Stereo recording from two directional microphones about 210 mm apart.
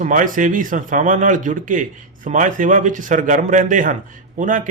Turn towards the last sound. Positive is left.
turn(degrees=-40)  # may be behind; listen again after turning